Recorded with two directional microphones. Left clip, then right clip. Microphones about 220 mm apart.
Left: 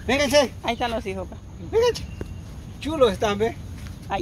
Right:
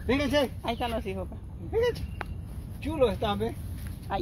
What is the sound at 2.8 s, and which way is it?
Speech, 30° left (ahead or behind).